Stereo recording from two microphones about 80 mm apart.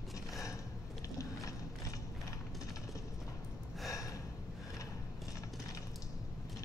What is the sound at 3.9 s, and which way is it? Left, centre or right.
Gasp, left.